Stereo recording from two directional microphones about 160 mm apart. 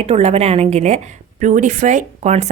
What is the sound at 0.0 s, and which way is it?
A woman's voice, 40° right (ahead or behind).